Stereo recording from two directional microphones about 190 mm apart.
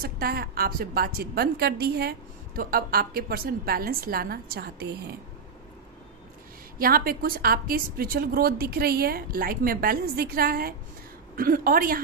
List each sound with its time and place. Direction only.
0.0 s a woman's voice: 55° right (ahead or behind)
6.8 s a woman's voice: 50° right (ahead or behind)